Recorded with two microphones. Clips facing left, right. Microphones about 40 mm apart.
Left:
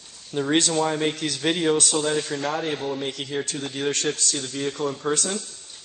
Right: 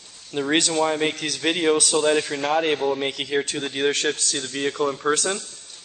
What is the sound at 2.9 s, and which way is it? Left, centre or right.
Speech, right.